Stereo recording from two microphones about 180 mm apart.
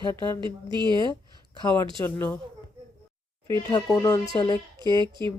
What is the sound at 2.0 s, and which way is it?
Speech, 10° left (ahead or behind).